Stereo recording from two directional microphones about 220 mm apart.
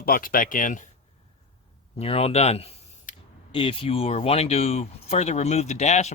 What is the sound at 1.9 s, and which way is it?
Speech, 25° left (ahead or behind).